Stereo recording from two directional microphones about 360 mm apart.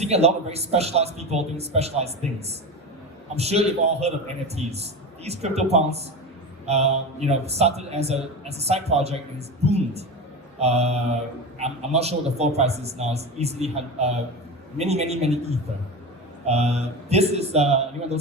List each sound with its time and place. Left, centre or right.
0.0 s a man's voice: centre